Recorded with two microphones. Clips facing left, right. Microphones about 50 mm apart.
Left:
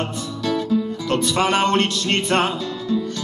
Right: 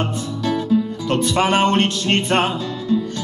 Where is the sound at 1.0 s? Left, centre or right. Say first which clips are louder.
Right 1 dB; right.